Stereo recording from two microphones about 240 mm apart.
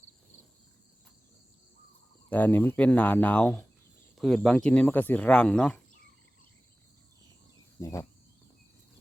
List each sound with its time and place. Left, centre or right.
2.3 s speech: centre
7.8 s cricket: centre